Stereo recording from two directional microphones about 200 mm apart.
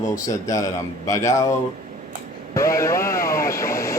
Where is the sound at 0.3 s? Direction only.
15° left (ahead or behind).